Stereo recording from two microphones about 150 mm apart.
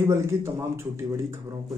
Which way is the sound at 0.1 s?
20° right (ahead or behind).